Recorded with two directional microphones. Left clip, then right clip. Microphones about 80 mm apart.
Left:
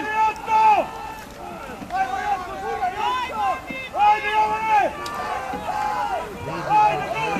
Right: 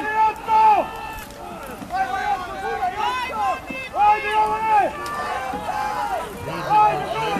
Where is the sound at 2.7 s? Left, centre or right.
Right.